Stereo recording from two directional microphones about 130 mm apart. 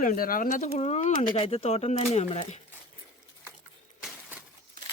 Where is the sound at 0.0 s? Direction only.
90° left.